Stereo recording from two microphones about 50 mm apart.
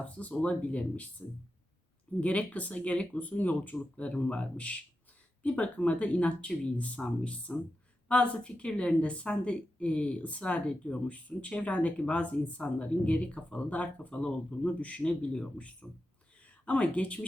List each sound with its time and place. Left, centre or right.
0.0 s a woman's voice: left
2.2 s a woman's voice: left
14.2 s a woman's voice: centre